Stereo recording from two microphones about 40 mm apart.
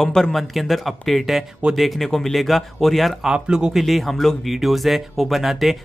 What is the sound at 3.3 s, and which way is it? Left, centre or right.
Speech, right.